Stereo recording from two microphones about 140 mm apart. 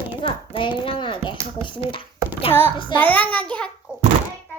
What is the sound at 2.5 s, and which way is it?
Speech, 15° left (ahead or behind).